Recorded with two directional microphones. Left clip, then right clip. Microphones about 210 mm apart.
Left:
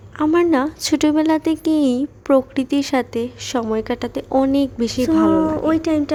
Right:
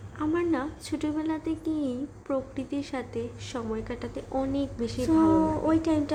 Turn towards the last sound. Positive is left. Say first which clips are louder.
# left 7 dB
turn(degrees=25)  # may be behind; listen again after turning